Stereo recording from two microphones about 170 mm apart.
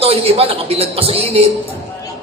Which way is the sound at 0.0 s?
35° right (ahead or behind).